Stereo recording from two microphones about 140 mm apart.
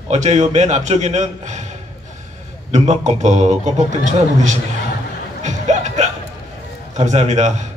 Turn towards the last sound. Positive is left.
turn(degrees=-55)  # may be behind; listen again after turning